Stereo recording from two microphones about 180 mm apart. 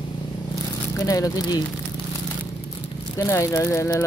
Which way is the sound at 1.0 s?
20° left (ahead or behind).